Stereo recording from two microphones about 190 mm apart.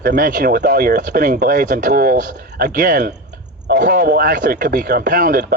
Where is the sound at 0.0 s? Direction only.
50° right (ahead or behind).